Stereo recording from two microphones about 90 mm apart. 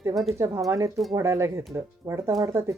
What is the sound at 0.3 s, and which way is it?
Speech, 35° right (ahead or behind).